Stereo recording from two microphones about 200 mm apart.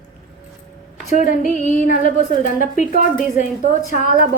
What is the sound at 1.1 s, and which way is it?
A woman's voice, 40° left (ahead or behind).